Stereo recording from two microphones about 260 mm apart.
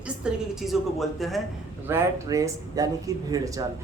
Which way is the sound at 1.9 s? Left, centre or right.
Centre.